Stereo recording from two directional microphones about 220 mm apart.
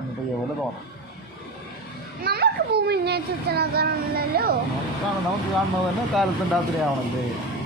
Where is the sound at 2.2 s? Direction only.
45° right (ahead or behind).